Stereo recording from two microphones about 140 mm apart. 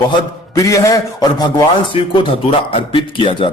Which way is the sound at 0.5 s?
25° left (ahead or behind).